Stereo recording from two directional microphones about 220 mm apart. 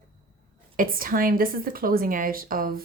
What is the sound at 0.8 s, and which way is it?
A woman's voice, 40° right (ahead or behind).